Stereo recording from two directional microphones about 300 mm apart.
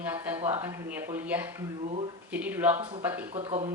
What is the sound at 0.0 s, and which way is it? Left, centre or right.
Speech, centre.